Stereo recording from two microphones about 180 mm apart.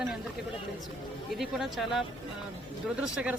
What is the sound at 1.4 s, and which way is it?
Speech, centre (ahead or behind).